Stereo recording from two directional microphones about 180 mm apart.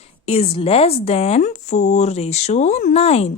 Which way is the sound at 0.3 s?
35° left (ahead or behind).